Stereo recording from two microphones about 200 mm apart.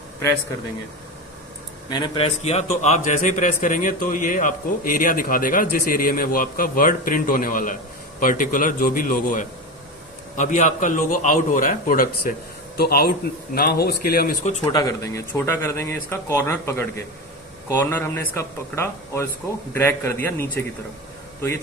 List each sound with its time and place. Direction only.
1.9 s speech: 20° left (ahead or behind)
2.4 s a man's voice: 30° left (ahead or behind); by 14.3 s 50° left (ahead or behind)
14.7 s speech: 20° left (ahead or behind)